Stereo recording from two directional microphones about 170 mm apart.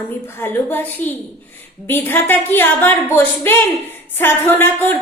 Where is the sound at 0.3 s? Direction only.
10° left (ahead or behind).